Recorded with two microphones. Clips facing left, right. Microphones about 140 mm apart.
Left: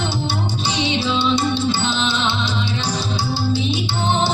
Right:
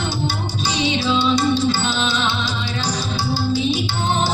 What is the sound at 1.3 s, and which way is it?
Music, 25° left (ahead or behind).